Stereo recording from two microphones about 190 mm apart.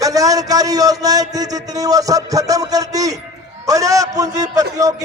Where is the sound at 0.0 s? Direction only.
20° right (ahead or behind).